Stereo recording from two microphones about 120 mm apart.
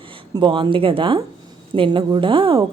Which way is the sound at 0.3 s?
40° right (ahead or behind).